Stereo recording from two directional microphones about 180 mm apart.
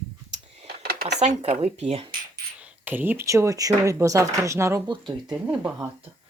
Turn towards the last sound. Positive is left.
turn(degrees=-10)  # may be behind; listen again after turning